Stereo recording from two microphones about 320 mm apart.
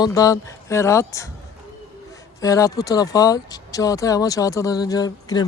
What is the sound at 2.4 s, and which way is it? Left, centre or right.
Speech, centre.